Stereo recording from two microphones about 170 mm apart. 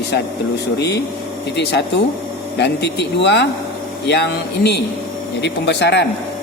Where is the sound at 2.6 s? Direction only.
80° left.